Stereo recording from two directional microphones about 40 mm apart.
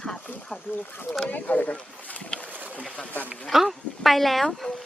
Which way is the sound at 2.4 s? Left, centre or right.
Right.